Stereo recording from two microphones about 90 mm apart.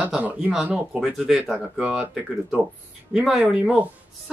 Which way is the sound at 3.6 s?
15° right (ahead or behind).